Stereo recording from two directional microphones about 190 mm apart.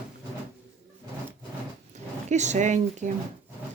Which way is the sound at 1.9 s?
40° right (ahead or behind).